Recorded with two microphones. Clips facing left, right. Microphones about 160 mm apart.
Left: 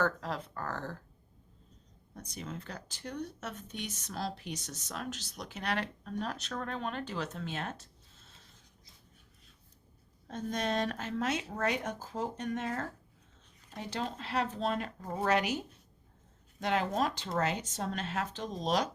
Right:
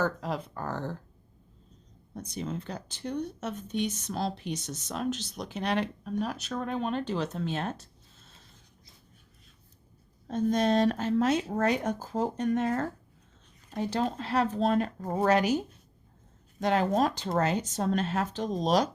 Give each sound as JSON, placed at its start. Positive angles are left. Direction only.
{"t": 0.0, "sound": "speech", "side_deg": -15}
{"t": 2.1, "sound": "speech", "side_deg": -25}
{"t": 10.2, "sound": "speech", "side_deg": -35}